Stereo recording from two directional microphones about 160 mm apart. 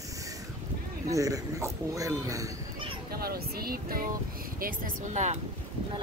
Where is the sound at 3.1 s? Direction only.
70° right (ahead or behind).